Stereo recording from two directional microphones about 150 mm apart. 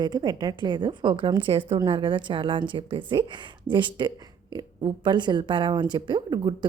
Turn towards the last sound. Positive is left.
turn(degrees=-30)  # may be behind; listen again after turning